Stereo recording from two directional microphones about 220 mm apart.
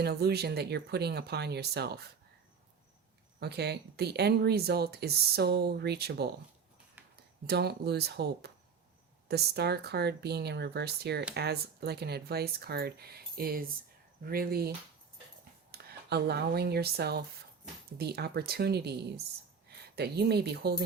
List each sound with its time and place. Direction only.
0.0 s speech: 45° right (ahead or behind)
3.4 s speech: 45° right (ahead or behind)
7.4 s speech: 50° right (ahead or behind)
15.7 s speech: 45° right (ahead or behind)